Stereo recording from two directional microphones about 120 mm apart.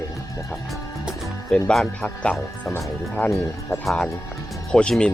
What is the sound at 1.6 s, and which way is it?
Speech, 5° left (ahead or behind).